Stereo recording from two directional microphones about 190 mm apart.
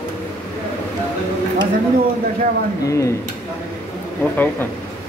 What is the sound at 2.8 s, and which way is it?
Speech, 15° left (ahead or behind).